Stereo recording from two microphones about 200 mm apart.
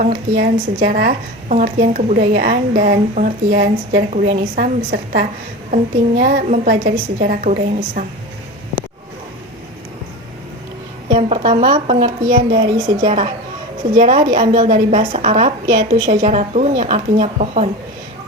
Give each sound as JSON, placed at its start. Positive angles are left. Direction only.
{"t": 0.3, "sound": "a woman's voice", "side_deg": -50}
{"t": 11.1, "sound": "a woman's voice", "side_deg": -30}